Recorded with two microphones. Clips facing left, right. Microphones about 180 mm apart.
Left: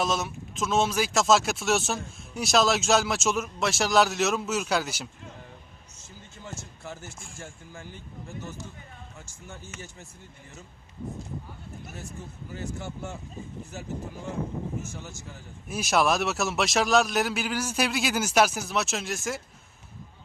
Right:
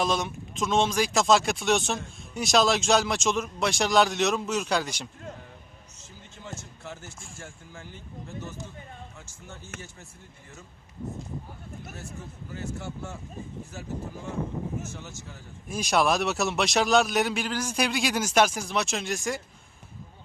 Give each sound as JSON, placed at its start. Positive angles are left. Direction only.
{"t": 0.0, "sound": "speech", "side_deg": 5}
{"t": 9.7, "sound": "speech", "side_deg": -55}
{"t": 15.6, "sound": "speech", "side_deg": 5}